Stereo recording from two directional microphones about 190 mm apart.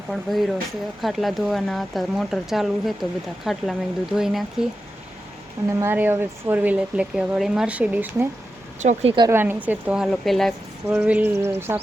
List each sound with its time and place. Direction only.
0.1 s speech: centre (ahead or behind)
5.8 s speech: 10° right (ahead or behind)
8.8 s speech: 35° right (ahead or behind)
9.2 s speech: 10° right (ahead or behind)
10.8 s speech: 10° right (ahead or behind)